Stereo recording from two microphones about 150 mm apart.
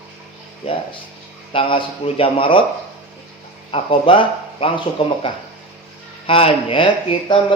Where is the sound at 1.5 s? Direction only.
35° left (ahead or behind).